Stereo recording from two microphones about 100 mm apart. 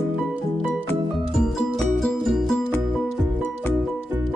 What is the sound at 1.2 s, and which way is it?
Music, centre (ahead or behind).